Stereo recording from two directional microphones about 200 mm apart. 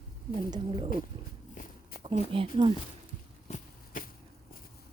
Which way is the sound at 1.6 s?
40° left (ahead or behind).